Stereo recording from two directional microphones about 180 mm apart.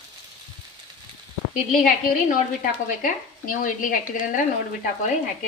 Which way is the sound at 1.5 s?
50° left (ahead or behind).